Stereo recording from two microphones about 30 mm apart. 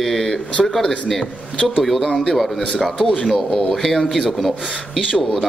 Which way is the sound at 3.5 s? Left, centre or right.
Centre.